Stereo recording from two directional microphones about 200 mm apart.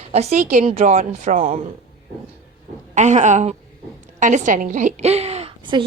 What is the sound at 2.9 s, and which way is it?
A woman's voice, 35° right (ahead or behind).